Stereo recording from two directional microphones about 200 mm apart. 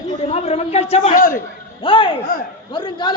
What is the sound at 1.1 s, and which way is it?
Speech, 45° left (ahead or behind).